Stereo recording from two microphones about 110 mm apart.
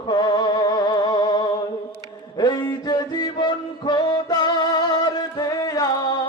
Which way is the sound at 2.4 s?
40° left (ahead or behind).